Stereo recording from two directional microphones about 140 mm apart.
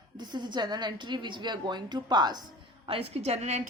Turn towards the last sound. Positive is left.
turn(degrees=-50)  # may be behind; listen again after turning